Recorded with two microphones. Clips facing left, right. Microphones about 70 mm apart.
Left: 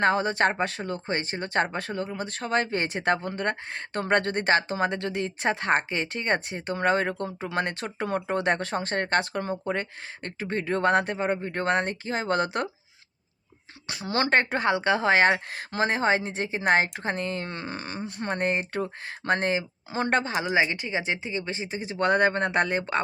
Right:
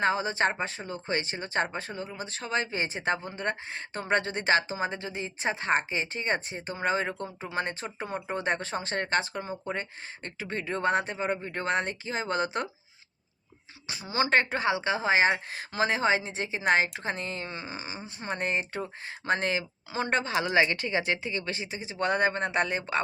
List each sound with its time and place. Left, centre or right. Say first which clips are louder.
0.0 s a woman's voice: left 3 dB; left
1.0 s a woman's voice: right 2 dB; left
4.8 s speech: left 5 dB; left
7.9 s speech: left 9 dB; left
8.5 s a woman's voice: left 3 dB; left
13.8 s speech: left 2 dB; left
14.3 s a woman's voice: left 2 dB; left
20.1 s a woman's voice: left 4 dB; left
20.4 s speech: even; centre
21.8 s a woman's voice: left 4 dB; left